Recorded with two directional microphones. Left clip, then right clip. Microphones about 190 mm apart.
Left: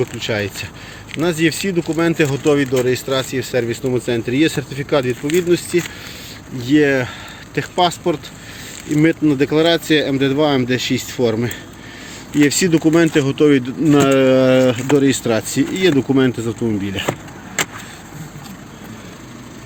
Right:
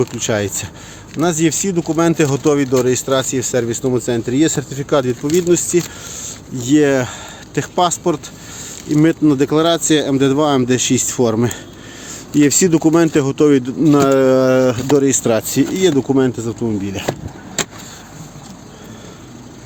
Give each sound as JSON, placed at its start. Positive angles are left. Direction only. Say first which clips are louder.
{"t": 0.0, "sound": "speech", "louder": "right 2 dB", "side_deg": -30}
{"t": 1.2, "sound": "speech", "louder": "right 1 dB", "side_deg": -10}
{"t": 16.1, "sound": "speech", "louder": "even", "side_deg": 0}